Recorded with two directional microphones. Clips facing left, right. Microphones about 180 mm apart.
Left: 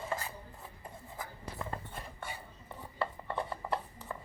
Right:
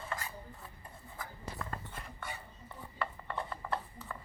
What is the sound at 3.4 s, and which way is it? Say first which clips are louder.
Rub: left 2 dB; 15° left (ahead or behind).